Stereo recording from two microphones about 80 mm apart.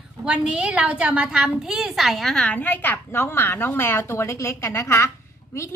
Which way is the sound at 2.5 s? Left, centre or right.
Left.